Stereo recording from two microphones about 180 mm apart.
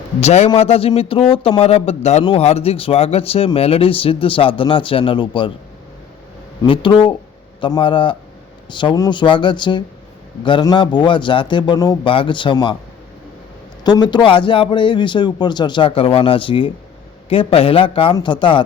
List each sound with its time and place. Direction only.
0.2 s a man's voice: 35° left (ahead or behind)
6.7 s a man's voice: 25° left (ahead or behind)
13.8 s a man's voice: 25° left (ahead or behind)